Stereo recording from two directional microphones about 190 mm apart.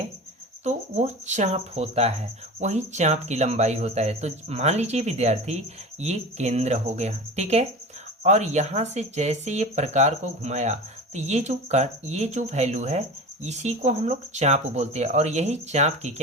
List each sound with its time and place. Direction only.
0.6 s speech: 35° right (ahead or behind)